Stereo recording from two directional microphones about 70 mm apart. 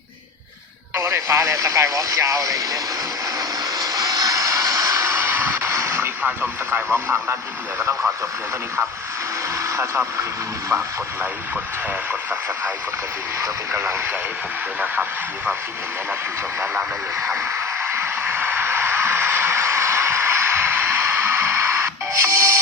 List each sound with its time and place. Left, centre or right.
0.9 s speech: right
3.8 s vehicle: right
5.7 s artillery fire: right
6.9 s speech: right
9.6 s speech: right
13.7 s speech: right
17.2 s speech: right
17.8 s a sound: right